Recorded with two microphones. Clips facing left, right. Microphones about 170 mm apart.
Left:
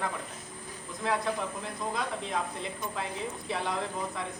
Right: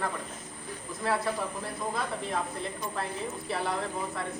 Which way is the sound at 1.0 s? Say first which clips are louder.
Right 1 dB; 5° right (ahead or behind).